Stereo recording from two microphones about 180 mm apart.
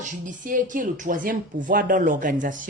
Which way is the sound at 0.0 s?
45° right (ahead or behind).